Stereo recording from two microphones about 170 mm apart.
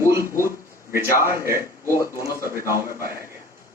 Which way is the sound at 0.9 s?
15° right (ahead or behind).